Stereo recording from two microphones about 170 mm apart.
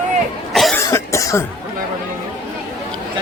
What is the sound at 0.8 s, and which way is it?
Cough, 15° left (ahead or behind).